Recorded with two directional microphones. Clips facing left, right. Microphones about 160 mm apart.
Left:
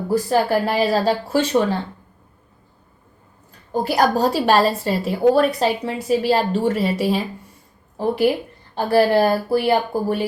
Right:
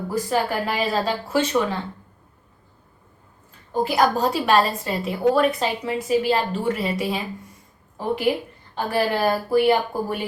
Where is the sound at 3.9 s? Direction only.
35° left (ahead or behind).